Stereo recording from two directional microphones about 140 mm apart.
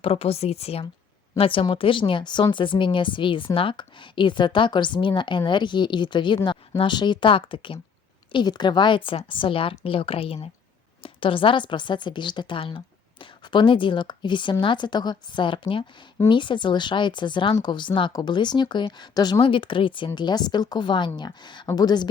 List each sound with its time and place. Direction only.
0.0 s a woman's voice: 45° left (ahead or behind)